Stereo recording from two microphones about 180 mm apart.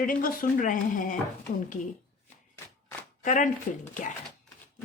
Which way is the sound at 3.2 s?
45° left (ahead or behind).